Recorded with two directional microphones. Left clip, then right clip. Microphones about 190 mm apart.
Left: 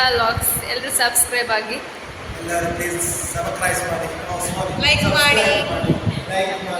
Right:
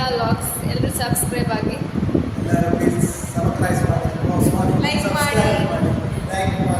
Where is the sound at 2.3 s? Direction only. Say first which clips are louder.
Left 4 dB; centre (ahead or behind).